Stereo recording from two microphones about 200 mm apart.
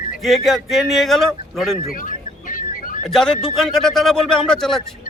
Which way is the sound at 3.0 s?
5° left (ahead or behind).